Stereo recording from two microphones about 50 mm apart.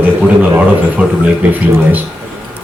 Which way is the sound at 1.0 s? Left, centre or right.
Right.